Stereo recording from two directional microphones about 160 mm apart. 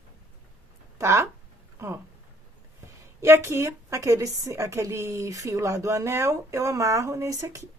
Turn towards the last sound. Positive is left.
turn(degrees=-20)  # may be behind; listen again after turning